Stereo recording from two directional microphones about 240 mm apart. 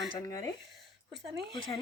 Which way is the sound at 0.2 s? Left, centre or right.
Centre.